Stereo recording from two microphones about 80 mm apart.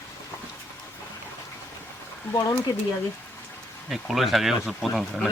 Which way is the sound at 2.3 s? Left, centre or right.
Left.